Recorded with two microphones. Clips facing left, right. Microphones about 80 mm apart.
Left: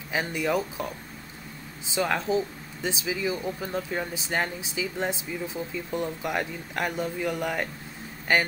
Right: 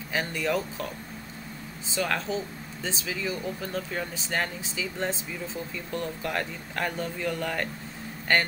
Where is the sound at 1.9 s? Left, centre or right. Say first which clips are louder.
Left 3 dB; centre.